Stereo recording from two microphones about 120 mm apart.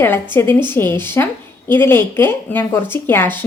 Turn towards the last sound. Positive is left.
turn(degrees=15)  # may be behind; listen again after turning